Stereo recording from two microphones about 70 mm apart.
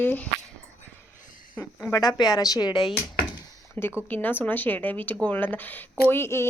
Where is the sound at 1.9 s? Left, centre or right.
Left.